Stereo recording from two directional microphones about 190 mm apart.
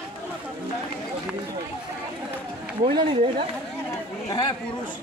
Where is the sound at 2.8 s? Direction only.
25° right (ahead or behind).